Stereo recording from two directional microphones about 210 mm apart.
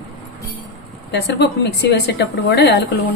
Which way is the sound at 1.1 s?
55° left (ahead or behind).